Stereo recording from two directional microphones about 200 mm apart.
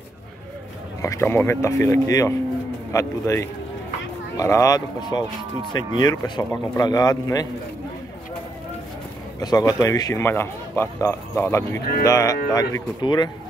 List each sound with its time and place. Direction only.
1.0 s speech: 15° left (ahead or behind)
9.4 s speech: 20° left (ahead or behind)